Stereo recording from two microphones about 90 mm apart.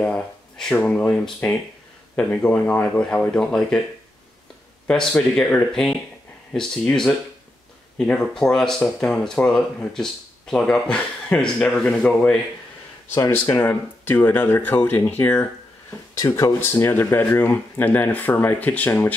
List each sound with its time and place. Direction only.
0.0 s speech: 10° left (ahead or behind)
4.8 s speech: 5° left (ahead or behind)
13.1 s speech: 30° left (ahead or behind)
16.2 s speech: 40° left (ahead or behind)
16.5 s speech: 25° left (ahead or behind)